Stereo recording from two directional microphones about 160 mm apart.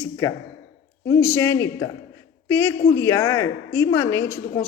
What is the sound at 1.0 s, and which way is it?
A man's voice, 20° left (ahead or behind).